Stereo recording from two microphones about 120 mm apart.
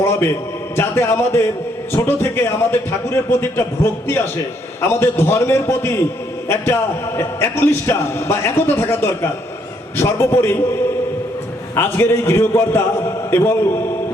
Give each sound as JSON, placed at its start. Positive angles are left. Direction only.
{"t": 0.0, "sound": "a sound", "side_deg": 20}
{"t": 0.8, "sound": "a man's voice", "side_deg": 20}
{"t": 7.2, "sound": "a man's voice", "side_deg": 20}